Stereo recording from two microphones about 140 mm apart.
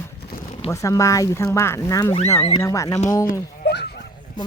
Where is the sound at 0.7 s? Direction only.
20° left (ahead or behind).